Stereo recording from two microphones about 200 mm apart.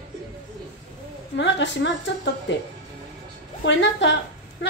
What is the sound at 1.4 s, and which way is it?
Speech, 65° left (ahead or behind).